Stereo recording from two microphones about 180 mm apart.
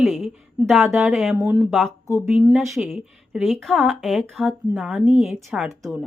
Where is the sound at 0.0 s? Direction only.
Centre (ahead or behind).